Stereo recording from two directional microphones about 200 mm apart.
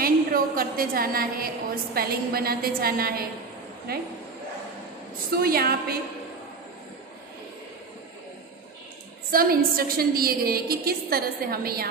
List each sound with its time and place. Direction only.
0.0 s a woman's voice: 45° right (ahead or behind)
5.4 s a woman's voice: 50° right (ahead or behind)
9.3 s a woman's voice: 45° right (ahead or behind)